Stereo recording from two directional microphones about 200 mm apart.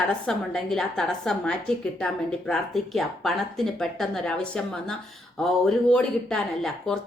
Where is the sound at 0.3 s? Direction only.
Centre (ahead or behind).